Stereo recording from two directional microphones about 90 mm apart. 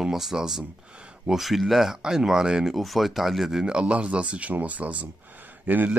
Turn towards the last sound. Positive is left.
turn(degrees=-20)  # may be behind; listen again after turning